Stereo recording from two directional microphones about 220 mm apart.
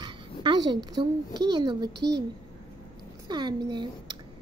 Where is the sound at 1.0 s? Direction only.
20° right (ahead or behind).